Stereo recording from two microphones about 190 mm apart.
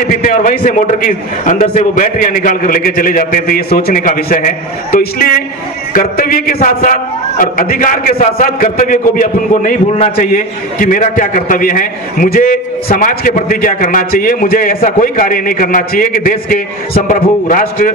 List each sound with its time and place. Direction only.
0.0 s a man's voice: 45° left (ahead or behind)
10.3 s a man's voice: 45° left (ahead or behind)